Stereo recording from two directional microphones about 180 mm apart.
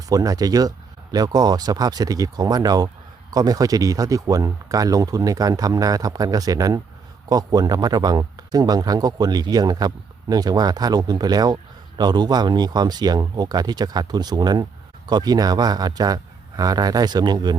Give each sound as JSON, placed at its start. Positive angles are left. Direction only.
{"t": 0.1, "sound": "speech", "side_deg": -20}